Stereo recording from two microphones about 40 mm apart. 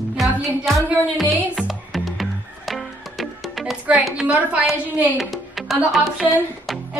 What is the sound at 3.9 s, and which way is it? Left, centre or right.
Speech, right.